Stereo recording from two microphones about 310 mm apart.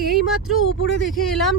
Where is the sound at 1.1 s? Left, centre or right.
Centre.